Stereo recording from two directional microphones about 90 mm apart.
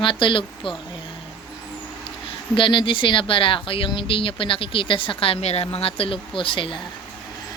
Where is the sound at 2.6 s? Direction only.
70° left (ahead or behind).